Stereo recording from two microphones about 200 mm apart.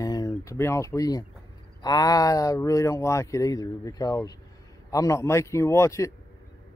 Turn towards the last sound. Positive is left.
turn(degrees=15)  # may be behind; listen again after turning